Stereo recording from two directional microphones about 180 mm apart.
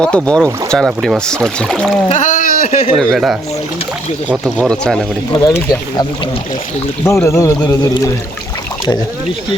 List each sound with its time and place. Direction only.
0.0 s speech: 5° left (ahead or behind)
2.0 s speech: 45° left (ahead or behind)
3.0 s speech: centre (ahead or behind)
5.3 s speech: 20° left (ahead or behind)